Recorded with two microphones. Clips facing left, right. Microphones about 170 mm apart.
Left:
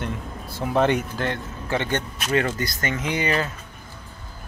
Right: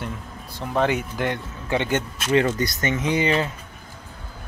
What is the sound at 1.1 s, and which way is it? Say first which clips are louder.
A man's voice: right 1 dB; 15° right (ahead or behind).